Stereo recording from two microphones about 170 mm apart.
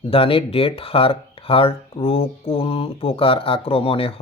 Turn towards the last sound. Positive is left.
turn(degrees=35)  # may be behind; listen again after turning